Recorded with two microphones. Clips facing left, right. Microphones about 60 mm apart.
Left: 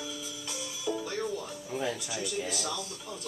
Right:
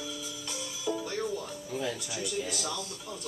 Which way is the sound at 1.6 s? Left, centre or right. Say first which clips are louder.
Left 2 dB; left.